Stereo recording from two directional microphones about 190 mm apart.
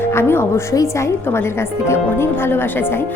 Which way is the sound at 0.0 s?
10° left (ahead or behind).